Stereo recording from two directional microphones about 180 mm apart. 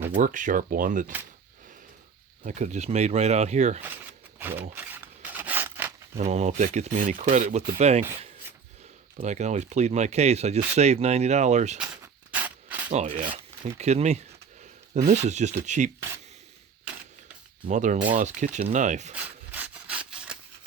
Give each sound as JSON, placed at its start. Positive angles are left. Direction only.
{"t": 0.2, "sound": "speech", "side_deg": -45}
{"t": 2.4, "sound": "speech", "side_deg": -45}
{"t": 4.4, "sound": "rub", "side_deg": -10}
{"t": 6.1, "sound": "speech", "side_deg": -40}
{"t": 9.1, "sound": "speech", "side_deg": -40}
{"t": 12.3, "sound": "a sound", "side_deg": -10}
{"t": 12.9, "sound": "speech", "side_deg": -40}
{"t": 17.7, "sound": "speech", "side_deg": -45}
{"t": 19.1, "sound": "wood", "side_deg": -10}